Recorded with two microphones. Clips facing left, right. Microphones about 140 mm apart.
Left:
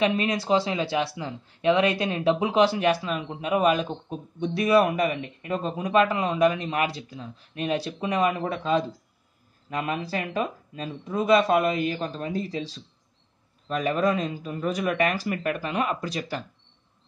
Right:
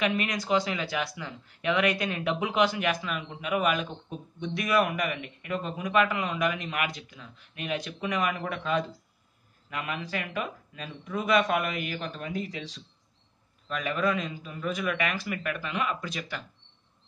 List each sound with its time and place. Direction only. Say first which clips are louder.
0.0 s speech: left 5 dB; 30° left (ahead or behind)